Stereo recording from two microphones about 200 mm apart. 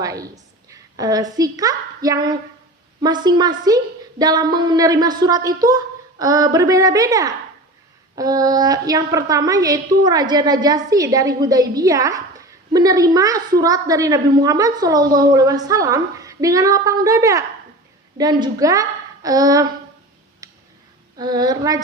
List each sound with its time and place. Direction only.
0.0 s a woman's voice: 15° right (ahead or behind)
20.4 s tick-tock: 15° right (ahead or behind)
21.2 s speech: 20° right (ahead or behind)